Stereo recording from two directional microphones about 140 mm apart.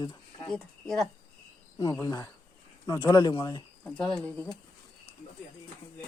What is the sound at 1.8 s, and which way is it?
Speech, 25° left (ahead or behind).